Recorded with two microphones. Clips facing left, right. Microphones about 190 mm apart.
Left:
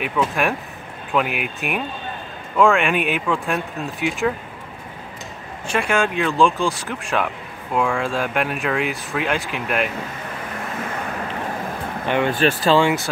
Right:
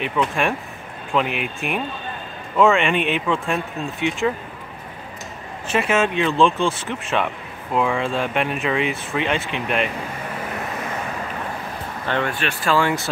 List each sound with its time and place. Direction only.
0.0 s speech: 5° left (ahead or behind)
5.7 s speech: 5° right (ahead or behind)
12.1 s speech: 15° left (ahead or behind)